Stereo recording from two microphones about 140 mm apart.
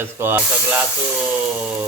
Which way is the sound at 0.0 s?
15° right (ahead or behind).